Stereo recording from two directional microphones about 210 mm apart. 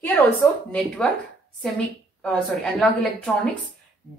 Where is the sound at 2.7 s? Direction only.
Centre (ahead or behind).